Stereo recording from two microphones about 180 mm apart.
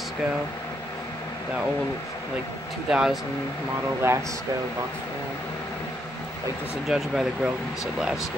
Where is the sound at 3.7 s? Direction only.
15° right (ahead or behind).